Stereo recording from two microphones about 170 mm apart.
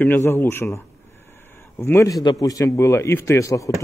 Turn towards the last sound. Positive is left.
turn(degrees=20)  # may be behind; listen again after turning